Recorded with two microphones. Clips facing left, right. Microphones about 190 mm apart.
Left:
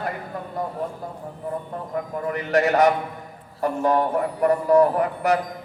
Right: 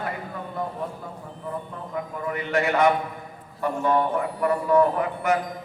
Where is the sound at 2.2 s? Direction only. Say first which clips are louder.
Left 4 dB; 40° left (ahead or behind).